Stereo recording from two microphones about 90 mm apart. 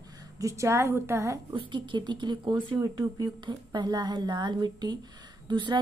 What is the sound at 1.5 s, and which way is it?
A woman's voice, 60° right (ahead or behind).